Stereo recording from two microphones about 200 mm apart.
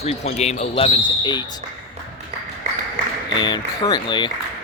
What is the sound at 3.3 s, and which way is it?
Speech, 20° left (ahead or behind).